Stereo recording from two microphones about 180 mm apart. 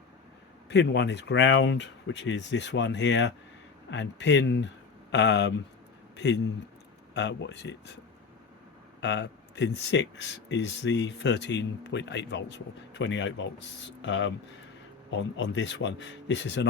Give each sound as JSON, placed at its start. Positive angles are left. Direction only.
{"t": 0.7, "sound": "speech", "side_deg": 75}
{"t": 6.1, "sound": "speech", "side_deg": 70}
{"t": 9.0, "sound": "speech", "side_deg": 75}
{"t": 15.1, "sound": "speech", "side_deg": 80}